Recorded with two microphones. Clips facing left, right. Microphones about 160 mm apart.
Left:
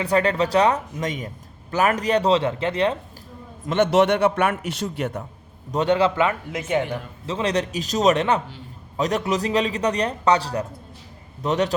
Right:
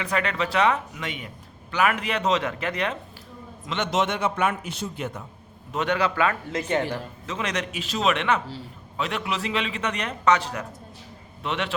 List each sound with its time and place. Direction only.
0.0 s a man's voice: 35° left (ahead or behind)
3.7 s a man's voice: 55° left (ahead or behind)
5.7 s a man's voice: 30° left (ahead or behind)
6.7 s speech: 10° left (ahead or behind)
7.3 s a man's voice: 30° left (ahead or behind)